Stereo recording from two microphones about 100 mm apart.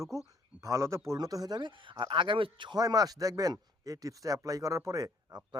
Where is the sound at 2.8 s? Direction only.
40° right (ahead or behind).